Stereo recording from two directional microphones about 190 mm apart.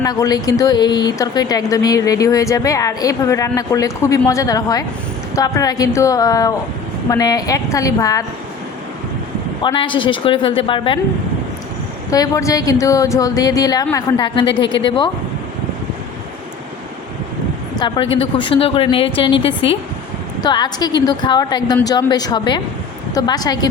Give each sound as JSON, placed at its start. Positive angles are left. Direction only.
{"t": 0.0, "sound": "speech", "side_deg": 20}
{"t": 9.6, "sound": "speech", "side_deg": 25}
{"t": 12.1, "sound": "speech", "side_deg": 20}
{"t": 17.7, "sound": "a woman's voice", "side_deg": 25}